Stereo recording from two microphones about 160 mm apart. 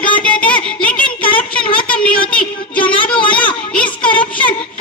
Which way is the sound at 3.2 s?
30° left (ahead or behind).